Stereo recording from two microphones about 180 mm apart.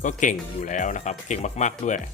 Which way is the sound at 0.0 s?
45° left (ahead or behind).